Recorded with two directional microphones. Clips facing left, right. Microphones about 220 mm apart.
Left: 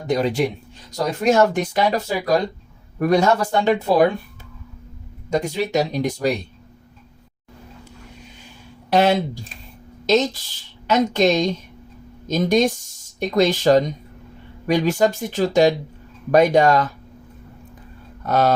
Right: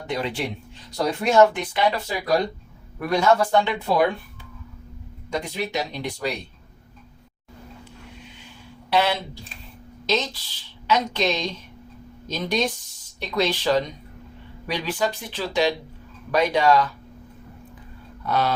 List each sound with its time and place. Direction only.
0.1 s speech: 40° left (ahead or behind)
5.3 s speech: 45° left (ahead or behind)
8.9 s speech: 45° left (ahead or behind)
18.3 s speech: 45° left (ahead or behind)